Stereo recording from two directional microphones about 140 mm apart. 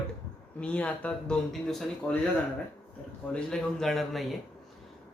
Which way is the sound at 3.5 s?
5° left (ahead or behind).